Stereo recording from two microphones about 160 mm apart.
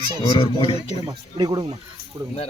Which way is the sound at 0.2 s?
35° left (ahead or behind).